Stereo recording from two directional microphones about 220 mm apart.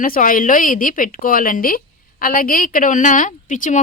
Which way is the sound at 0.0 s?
40° left (ahead or behind).